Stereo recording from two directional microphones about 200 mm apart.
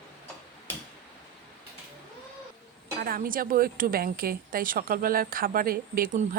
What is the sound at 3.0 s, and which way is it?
Speech, 45° right (ahead or behind).